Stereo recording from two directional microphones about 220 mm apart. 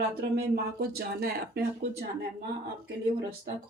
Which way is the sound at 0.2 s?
45° right (ahead or behind).